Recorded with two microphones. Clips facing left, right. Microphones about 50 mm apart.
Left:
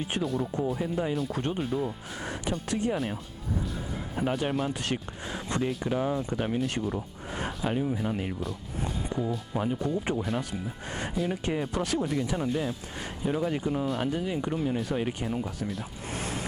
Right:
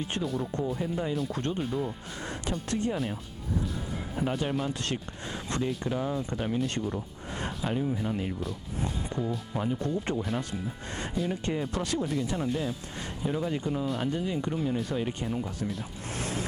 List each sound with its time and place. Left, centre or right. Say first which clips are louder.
0.0 s speech: left 2 dB; centre
6.6 s speech: left 1 dB; centre
8.4 s speech: even; centre